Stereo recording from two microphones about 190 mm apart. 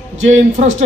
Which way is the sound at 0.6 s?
40° right (ahead or behind).